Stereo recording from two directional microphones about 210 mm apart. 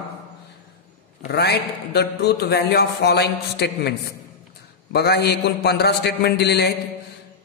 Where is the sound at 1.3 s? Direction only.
50° left (ahead or behind).